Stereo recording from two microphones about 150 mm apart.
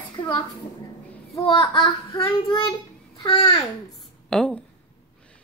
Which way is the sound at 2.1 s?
30° left (ahead or behind).